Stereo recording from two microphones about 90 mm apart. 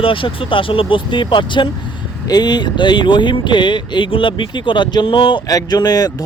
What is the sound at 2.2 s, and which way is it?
Speech, 50° left (ahead or behind).